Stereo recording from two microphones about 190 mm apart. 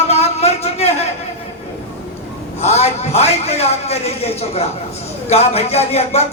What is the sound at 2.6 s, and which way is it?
A man's voice, 35° left (ahead or behind).